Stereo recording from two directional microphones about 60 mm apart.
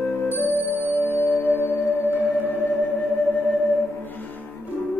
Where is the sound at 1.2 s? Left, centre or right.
Left.